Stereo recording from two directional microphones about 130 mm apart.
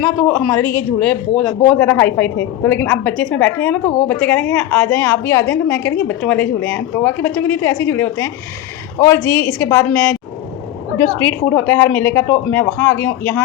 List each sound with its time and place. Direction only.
0.0 s a woman's voice: 10° left (ahead or behind)
11.2 s a woman's voice: 15° left (ahead or behind)